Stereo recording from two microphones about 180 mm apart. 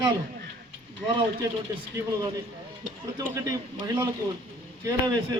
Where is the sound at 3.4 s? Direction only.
20° right (ahead or behind).